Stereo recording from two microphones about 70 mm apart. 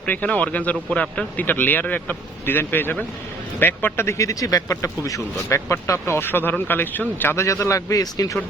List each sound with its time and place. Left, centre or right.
0.1 s speech: left
1.4 s speech: left